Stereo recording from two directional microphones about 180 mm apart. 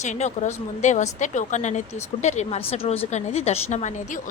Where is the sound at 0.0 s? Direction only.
40° left (ahead or behind).